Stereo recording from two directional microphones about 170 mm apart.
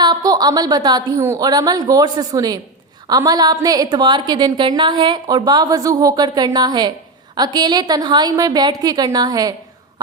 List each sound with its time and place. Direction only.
0.0 s a woman's voice: 25° right (ahead or behind)